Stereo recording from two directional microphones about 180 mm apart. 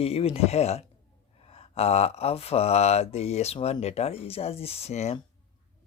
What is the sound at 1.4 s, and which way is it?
Mantra, 35° left (ahead or behind).